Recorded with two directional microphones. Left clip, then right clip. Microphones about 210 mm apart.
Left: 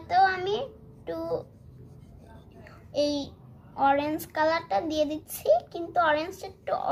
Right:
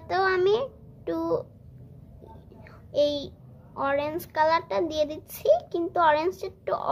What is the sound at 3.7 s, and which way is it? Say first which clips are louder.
A child's voice: left 3 dB; 40° right (ahead or behind).